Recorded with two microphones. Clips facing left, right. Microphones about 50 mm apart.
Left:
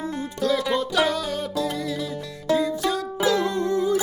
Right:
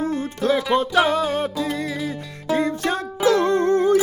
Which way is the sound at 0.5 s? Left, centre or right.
Right.